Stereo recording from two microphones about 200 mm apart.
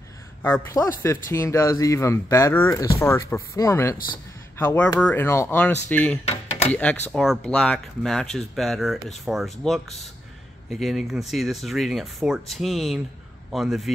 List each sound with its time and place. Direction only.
0.4 s speech: 10° left (ahead or behind)